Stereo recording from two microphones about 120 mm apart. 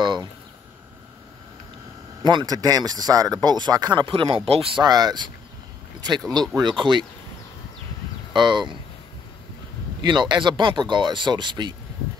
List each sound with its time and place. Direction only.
0.0 s a sound: 40° right (ahead or behind)
2.2 s speech: 35° right (ahead or behind)
4.1 s speech: 45° right (ahead or behind)
8.3 s speech: 40° right (ahead or behind)
10.0 s speech: 40° right (ahead or behind)